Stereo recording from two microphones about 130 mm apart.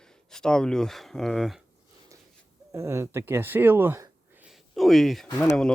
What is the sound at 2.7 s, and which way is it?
Speech, 20° right (ahead or behind).